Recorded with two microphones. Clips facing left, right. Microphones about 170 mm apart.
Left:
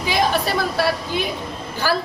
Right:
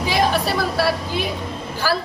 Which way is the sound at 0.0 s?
Centre (ahead or behind).